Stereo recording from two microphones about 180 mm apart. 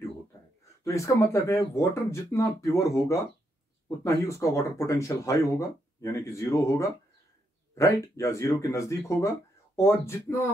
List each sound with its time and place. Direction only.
0.8 s speech: 15° left (ahead or behind)